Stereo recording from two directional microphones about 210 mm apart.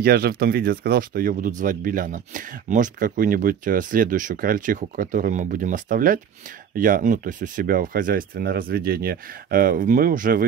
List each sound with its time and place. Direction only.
0.0 s speech: 45° right (ahead or behind)